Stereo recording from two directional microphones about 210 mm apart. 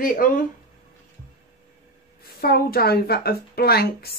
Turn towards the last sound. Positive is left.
turn(degrees=45)  # may be behind; listen again after turning